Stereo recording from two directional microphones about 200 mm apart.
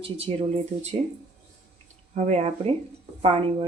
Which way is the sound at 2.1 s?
35° right (ahead or behind).